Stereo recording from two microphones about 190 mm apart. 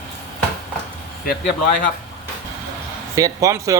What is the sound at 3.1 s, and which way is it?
Speech, 15° right (ahead or behind).